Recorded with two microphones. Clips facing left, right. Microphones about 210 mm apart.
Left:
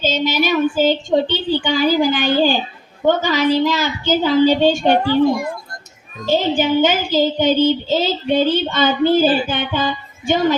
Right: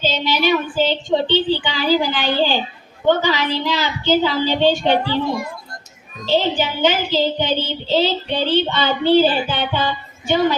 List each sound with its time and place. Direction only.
0.0 s child singing: 45° left (ahead or behind)